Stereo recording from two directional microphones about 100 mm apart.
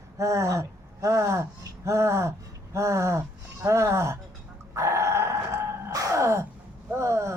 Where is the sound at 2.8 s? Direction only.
30° right (ahead or behind).